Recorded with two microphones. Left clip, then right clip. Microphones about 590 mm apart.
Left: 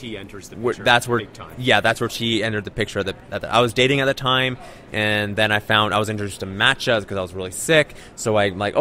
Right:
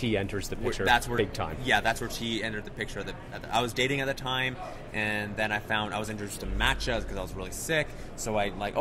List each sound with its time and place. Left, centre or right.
0.0 s speech: right
0.8 s speech: left